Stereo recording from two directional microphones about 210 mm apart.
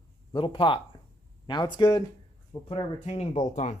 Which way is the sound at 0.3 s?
25° left (ahead or behind).